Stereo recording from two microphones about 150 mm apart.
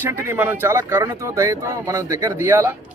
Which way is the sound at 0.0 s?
15° right (ahead or behind).